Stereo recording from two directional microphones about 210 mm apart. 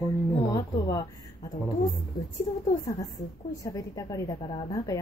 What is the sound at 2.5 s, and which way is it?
A woman's voice, 25° left (ahead or behind).